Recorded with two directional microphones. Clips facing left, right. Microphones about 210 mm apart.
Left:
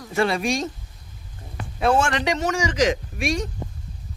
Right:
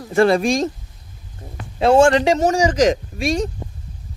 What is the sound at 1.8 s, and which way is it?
Speech, 30° right (ahead or behind).